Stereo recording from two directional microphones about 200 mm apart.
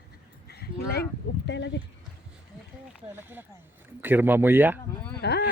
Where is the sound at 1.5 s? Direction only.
60° left (ahead or behind).